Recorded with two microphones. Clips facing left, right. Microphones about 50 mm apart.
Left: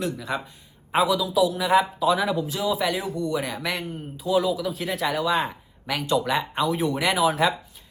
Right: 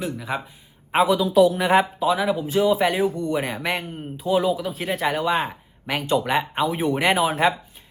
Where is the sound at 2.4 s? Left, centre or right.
Right.